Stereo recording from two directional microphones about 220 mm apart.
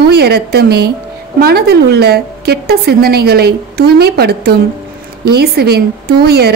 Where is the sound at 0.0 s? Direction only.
45° right (ahead or behind).